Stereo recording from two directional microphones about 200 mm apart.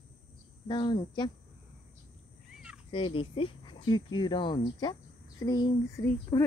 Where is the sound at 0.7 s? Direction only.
20° left (ahead or behind).